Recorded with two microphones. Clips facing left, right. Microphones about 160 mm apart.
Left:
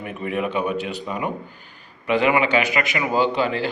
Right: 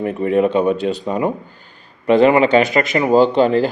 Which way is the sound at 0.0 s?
30° right (ahead or behind).